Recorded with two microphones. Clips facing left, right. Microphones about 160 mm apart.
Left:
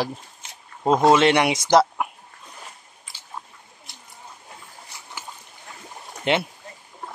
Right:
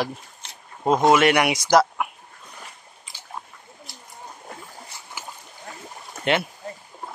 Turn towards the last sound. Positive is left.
turn(degrees=20)  # may be behind; listen again after turning